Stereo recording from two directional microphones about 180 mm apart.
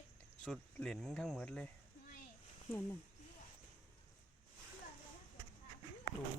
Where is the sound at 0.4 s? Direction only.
Centre (ahead or behind).